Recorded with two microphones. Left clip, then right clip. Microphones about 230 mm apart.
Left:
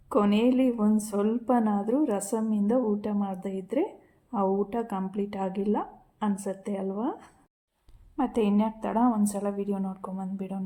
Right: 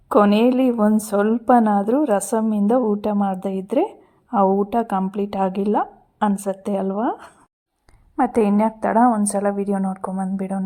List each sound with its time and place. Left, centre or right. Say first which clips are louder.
0.1 s a woman's voice: right 9 dB; right